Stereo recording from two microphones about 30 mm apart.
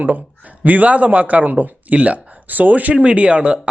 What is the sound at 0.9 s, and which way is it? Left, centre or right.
Speech, right.